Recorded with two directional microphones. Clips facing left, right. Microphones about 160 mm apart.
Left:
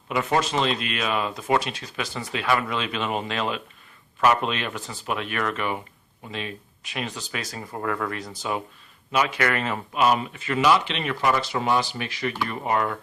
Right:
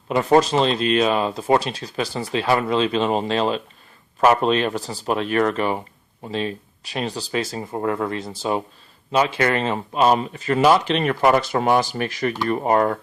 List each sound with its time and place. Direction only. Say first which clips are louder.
0.1 s speech: right 7 dB; 35° right (ahead or behind)